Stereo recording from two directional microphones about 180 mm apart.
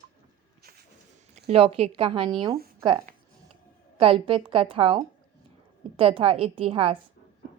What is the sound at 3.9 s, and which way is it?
A woman's voice, 30° right (ahead or behind).